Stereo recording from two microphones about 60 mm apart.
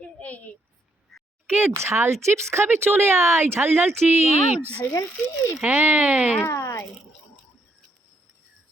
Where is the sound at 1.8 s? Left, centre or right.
Right.